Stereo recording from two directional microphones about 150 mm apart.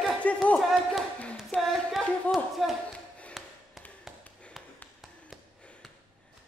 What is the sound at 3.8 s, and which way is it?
Tap, centre (ahead or behind).